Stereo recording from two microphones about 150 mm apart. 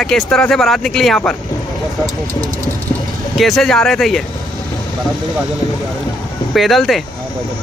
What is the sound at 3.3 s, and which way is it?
Speech, centre (ahead or behind).